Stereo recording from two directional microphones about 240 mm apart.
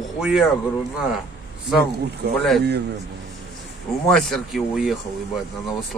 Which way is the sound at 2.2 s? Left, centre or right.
Right.